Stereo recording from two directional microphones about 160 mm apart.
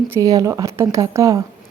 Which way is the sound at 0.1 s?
20° right (ahead or behind).